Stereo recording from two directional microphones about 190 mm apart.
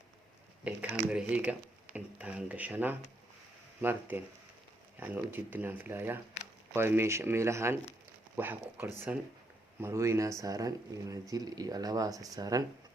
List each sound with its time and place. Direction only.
0.6 s speech: 5° right (ahead or behind)